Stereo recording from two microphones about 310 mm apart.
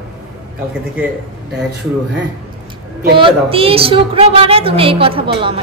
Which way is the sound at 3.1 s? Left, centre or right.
Centre.